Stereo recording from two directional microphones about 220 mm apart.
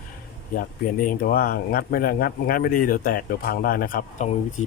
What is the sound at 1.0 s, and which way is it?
Speech, 40° left (ahead or behind).